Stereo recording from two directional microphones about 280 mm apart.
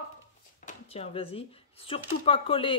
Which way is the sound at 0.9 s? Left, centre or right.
Left.